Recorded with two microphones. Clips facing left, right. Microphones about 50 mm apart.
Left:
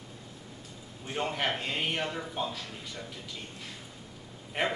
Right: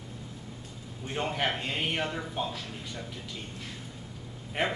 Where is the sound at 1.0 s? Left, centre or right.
Centre.